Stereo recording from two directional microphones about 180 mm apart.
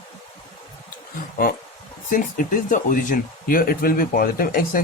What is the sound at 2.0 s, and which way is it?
Speech, 50° left (ahead or behind).